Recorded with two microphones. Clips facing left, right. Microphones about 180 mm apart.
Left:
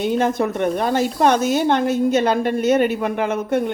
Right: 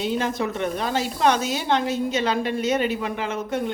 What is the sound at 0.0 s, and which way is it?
Speech, 55° left (ahead or behind).